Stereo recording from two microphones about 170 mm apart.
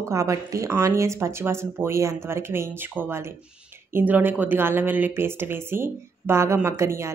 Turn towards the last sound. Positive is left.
turn(degrees=-15)  # may be behind; listen again after turning